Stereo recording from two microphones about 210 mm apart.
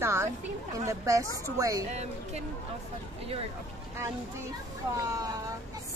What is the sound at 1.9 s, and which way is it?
Speech, 30° right (ahead or behind).